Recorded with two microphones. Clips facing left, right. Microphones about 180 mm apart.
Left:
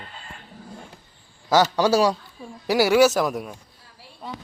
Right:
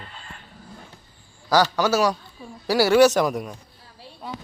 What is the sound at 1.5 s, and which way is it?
Speech, 25° left (ahead or behind).